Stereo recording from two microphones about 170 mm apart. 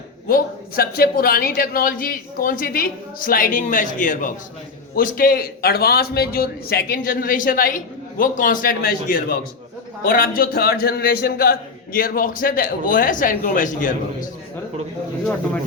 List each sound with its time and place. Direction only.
0.3 s a man's voice: 60° left (ahead or behind)